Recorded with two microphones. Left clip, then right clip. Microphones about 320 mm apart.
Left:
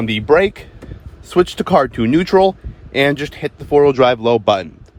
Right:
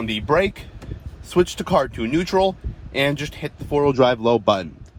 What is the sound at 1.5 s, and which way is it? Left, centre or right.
Speech, left.